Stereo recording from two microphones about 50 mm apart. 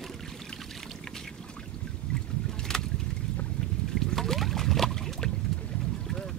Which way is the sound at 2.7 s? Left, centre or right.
Centre.